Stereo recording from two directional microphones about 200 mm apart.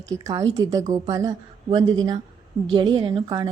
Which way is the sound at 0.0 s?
15° right (ahead or behind).